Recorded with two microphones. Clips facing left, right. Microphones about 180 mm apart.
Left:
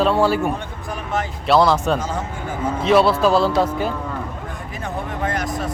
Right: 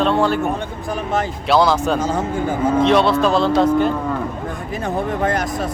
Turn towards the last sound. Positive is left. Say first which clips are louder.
# right 5 dB
turn(degrees=-35)  # may be behind; listen again after turning